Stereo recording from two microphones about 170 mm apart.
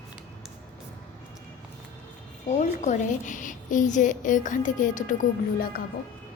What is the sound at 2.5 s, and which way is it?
A woman's voice, 45° left (ahead or behind).